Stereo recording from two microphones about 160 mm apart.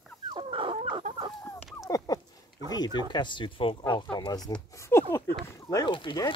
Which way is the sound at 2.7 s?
25° left (ahead or behind).